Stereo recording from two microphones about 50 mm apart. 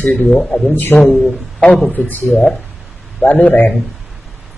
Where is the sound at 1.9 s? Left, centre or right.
Left.